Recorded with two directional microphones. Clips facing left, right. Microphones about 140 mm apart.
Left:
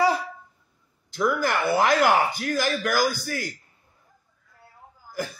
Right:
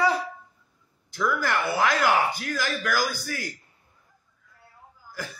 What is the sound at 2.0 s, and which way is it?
Speech, 35° left (ahead or behind).